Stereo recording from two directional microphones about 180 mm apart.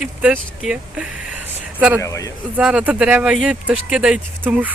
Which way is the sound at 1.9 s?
15° left (ahead or behind).